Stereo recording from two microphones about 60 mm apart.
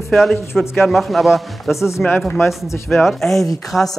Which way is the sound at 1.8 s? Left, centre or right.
Left.